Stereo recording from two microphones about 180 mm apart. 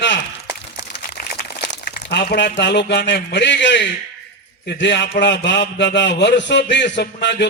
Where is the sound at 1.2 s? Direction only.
50° left (ahead or behind).